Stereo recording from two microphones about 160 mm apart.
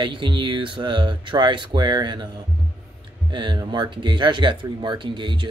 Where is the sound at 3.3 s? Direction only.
30° right (ahead or behind).